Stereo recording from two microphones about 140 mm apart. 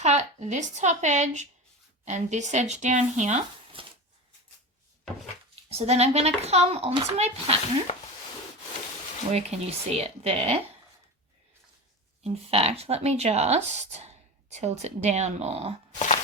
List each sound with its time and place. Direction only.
0.0 s a woman's voice: 55° right (ahead or behind)
3.8 s shuffling cards: 40° right (ahead or behind)
5.7 s speech: 50° right (ahead or behind)
9.3 s speech: 50° right (ahead or behind)
12.2 s speech: 45° right (ahead or behind)
16.0 s a sound: 55° left (ahead or behind)